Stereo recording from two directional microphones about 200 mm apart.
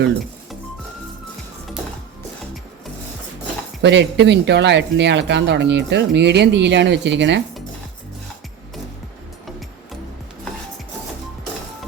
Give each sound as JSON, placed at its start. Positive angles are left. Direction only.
{"t": 3.8, "sound": "speech", "side_deg": -60}